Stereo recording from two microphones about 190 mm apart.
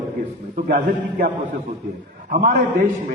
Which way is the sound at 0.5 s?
50° right (ahead or behind).